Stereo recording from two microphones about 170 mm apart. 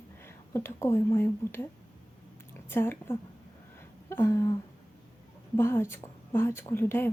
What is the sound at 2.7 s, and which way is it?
A woman's voice, 15° left (ahead or behind).